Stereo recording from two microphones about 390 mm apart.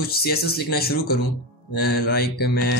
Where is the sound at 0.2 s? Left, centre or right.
Left.